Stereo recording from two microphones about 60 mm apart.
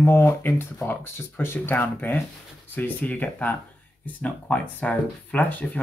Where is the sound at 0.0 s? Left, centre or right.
Left.